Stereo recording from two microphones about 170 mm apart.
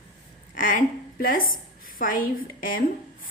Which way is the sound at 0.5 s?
50° left (ahead or behind).